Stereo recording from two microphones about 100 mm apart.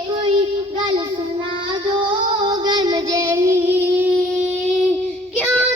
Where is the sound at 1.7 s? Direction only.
55° right (ahead or behind); by 4.1 s 20° right (ahead or behind).